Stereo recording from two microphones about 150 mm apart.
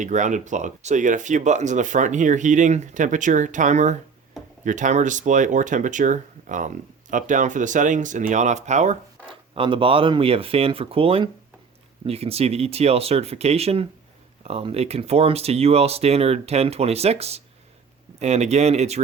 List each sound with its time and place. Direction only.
0.0 s speech: 55° right (ahead or behind)
9.6 s speech: 35° right (ahead or behind)